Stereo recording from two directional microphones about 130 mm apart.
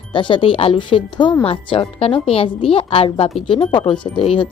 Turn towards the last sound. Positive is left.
turn(degrees=45)  # may be behind; listen again after turning